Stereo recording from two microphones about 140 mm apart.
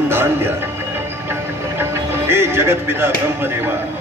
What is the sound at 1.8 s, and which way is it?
Speech, 15° right (ahead or behind).